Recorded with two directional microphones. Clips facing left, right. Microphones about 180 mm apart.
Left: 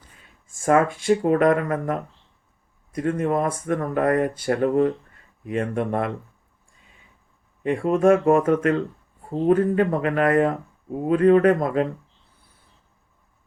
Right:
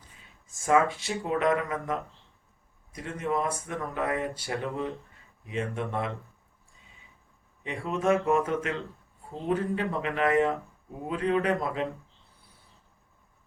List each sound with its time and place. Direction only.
0.4 s speech: 50° left (ahead or behind)
7.6 s speech: 50° left (ahead or behind)